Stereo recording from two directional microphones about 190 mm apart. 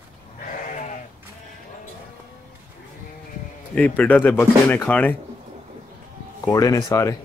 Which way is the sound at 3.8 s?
10° left (ahead or behind).